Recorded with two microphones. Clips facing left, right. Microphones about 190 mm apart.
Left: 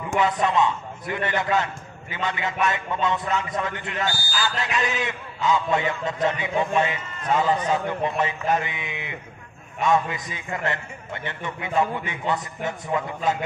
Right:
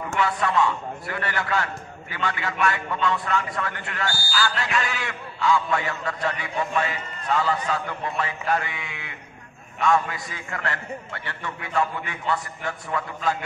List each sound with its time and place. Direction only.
0.1 s a man's voice: 20° left (ahead or behind)